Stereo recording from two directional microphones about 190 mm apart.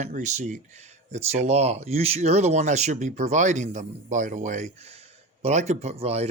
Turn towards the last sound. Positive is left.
turn(degrees=-35)  # may be behind; listen again after turning